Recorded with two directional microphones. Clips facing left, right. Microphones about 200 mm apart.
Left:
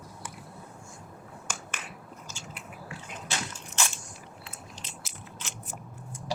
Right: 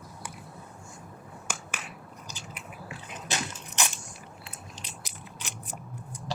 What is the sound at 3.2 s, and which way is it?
Crushing, 20° right (ahead or behind).